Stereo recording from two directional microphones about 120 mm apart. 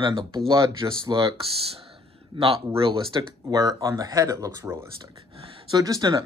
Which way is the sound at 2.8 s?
50° right (ahead or behind).